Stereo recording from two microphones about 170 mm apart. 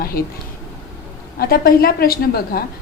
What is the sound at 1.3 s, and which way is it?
A woman's voice, 60° left (ahead or behind).